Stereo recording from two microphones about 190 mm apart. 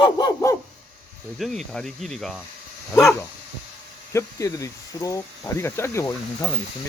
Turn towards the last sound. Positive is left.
turn(degrees=15)  # may be behind; listen again after turning